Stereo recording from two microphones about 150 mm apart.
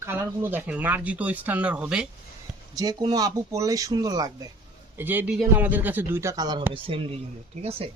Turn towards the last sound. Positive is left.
turn(degrees=-40)  # may be behind; listen again after turning